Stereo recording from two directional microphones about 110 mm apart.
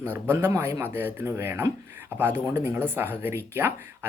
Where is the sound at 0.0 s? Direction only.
20° right (ahead or behind).